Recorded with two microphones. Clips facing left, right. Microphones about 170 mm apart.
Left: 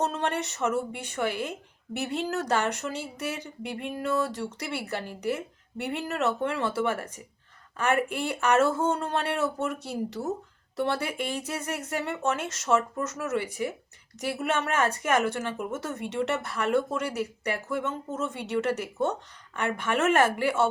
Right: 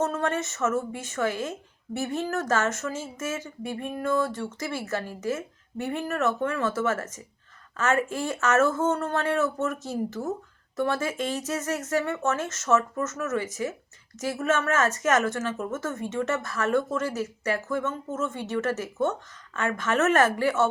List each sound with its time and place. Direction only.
0.2 s speech: 15° left (ahead or behind)
10.8 s speech: 15° left (ahead or behind)